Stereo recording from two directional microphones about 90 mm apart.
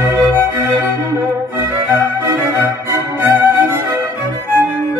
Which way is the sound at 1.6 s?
25° right (ahead or behind).